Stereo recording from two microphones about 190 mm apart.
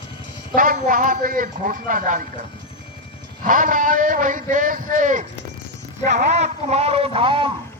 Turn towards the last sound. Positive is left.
turn(degrees=-25)  # may be behind; listen again after turning